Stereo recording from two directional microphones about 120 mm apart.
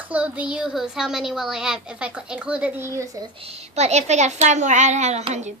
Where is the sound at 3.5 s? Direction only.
65° right (ahead or behind).